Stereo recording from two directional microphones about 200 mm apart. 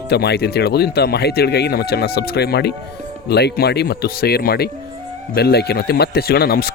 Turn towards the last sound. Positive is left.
turn(degrees=50)  # may be behind; listen again after turning